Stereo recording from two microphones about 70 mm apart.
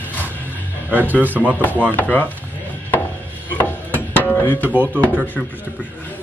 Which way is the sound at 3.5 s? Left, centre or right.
Left.